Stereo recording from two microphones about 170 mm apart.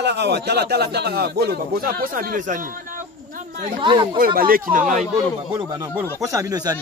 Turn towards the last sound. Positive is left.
turn(degrees=-25)  # may be behind; listen again after turning